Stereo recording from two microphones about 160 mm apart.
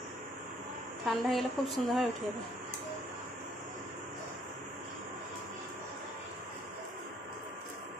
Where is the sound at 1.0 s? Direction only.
Centre (ahead or behind).